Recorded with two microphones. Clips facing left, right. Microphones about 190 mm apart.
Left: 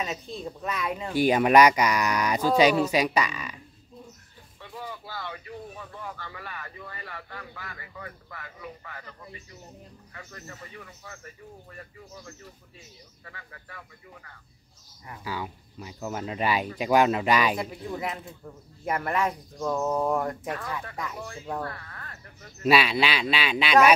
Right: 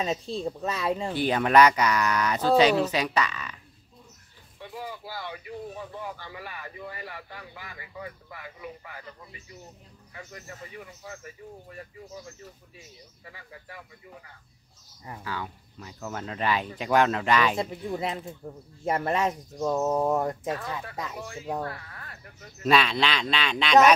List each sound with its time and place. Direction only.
0.4 s speech: 25° right (ahead or behind)
1.1 s speech: 10° left (ahead or behind)
4.6 s speech: 10° right (ahead or behind)
10.1 s speech: 15° right (ahead or behind)
13.2 s speech: 15° right (ahead or behind)
15.2 s speech: 10° left (ahead or behind)
17.6 s speech: 25° right (ahead or behind)
22.6 s speech: 10° left (ahead or behind)